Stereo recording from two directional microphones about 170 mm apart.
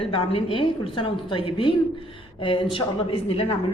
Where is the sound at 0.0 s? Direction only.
35° left (ahead or behind).